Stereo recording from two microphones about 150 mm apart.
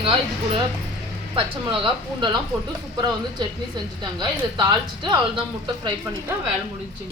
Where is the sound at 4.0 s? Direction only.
30° right (ahead or behind).